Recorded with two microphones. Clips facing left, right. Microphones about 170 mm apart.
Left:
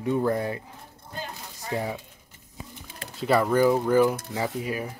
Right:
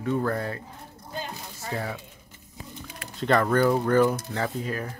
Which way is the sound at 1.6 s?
15° left (ahead or behind).